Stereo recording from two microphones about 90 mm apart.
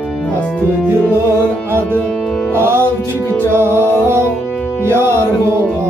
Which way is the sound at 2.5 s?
25° right (ahead or behind).